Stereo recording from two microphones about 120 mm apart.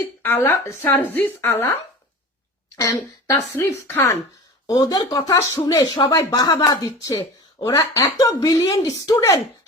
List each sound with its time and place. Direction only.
0.2 s speech: 20° left (ahead or behind)
2.8 s speech: 25° left (ahead or behind)
4.6 s speech: 30° left (ahead or behind)